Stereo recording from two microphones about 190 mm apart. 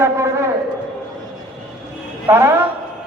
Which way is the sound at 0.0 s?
15° right (ahead or behind).